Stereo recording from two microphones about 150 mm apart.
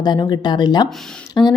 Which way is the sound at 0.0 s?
30° left (ahead or behind).